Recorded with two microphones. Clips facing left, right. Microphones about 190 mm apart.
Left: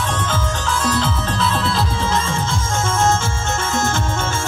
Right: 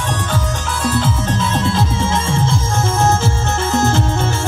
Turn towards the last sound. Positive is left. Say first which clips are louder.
# right 5 dB
turn(degrees=-35)  # may be behind; listen again after turning